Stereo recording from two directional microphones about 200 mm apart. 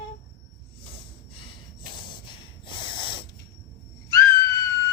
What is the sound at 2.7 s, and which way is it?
Owl, 25° left (ahead or behind).